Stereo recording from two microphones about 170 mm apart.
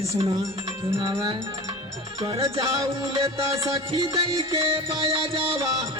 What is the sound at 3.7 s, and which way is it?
Music, 30° right (ahead or behind).